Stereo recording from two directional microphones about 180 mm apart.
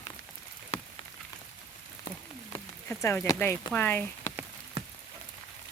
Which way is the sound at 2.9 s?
15° left (ahead or behind).